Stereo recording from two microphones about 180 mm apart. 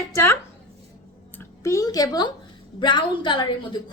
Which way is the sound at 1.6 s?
20° left (ahead or behind).